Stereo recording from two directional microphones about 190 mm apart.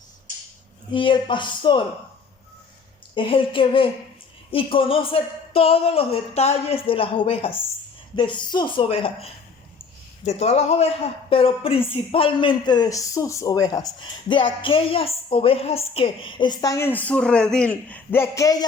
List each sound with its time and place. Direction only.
0.9 s a man's voice: 25° left (ahead or behind)
3.2 s a man's voice: 25° left (ahead or behind)